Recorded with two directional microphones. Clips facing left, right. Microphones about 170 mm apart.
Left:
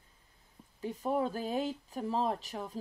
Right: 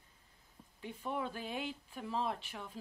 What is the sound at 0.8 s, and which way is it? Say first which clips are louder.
Speech: left 8 dB; 40° left (ahead or behind).